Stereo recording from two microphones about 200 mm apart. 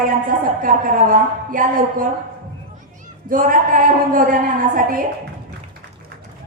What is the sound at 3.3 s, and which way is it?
A woman's voice, 45° right (ahead or behind).